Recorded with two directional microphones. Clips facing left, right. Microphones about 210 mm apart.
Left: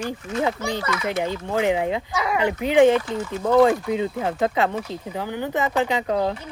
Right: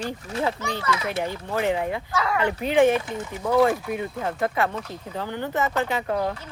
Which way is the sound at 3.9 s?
20° left (ahead or behind).